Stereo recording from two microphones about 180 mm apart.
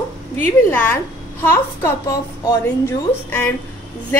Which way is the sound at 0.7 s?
10° left (ahead or behind).